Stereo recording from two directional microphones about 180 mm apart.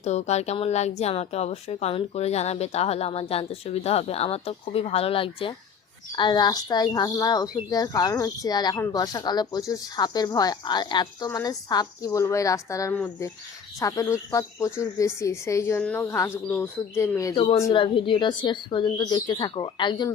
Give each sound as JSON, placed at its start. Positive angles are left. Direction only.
{"t": 0.0, "sound": "a woman's voice", "side_deg": 40}
{"t": 17.3, "sound": "speech", "side_deg": 30}